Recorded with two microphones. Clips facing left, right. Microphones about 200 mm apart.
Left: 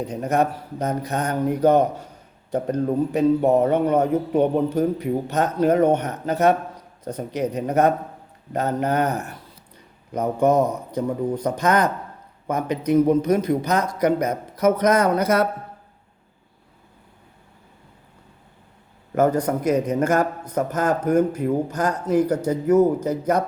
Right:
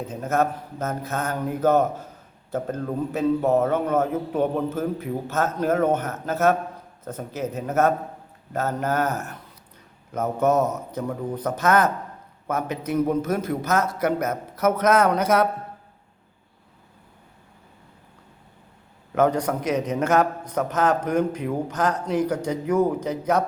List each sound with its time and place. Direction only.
0.0 s a man's voice: 15° left (ahead or behind)
19.1 s a man's voice: 10° left (ahead or behind)